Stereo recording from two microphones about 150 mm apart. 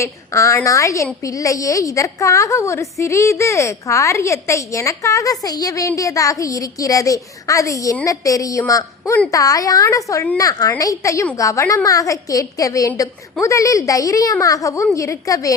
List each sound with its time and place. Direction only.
0.0 s a woman's voice: 20° left (ahead or behind)